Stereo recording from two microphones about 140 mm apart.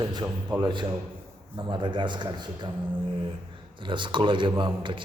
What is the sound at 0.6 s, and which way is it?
Speech, 35° right (ahead or behind).